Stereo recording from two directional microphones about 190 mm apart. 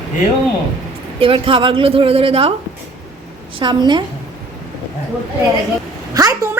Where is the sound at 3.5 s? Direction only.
25° right (ahead or behind).